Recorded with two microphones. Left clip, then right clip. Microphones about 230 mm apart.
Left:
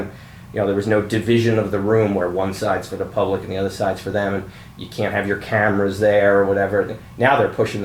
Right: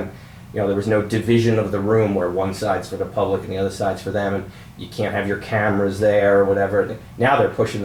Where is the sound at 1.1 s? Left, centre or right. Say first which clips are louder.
Even; centre.